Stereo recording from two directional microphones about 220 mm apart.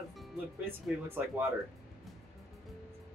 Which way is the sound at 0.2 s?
5° right (ahead or behind).